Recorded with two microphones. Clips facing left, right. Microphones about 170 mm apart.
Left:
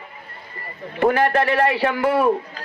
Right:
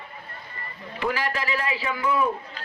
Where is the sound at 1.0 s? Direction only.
55° left (ahead or behind); by 2.3 s 75° left (ahead or behind).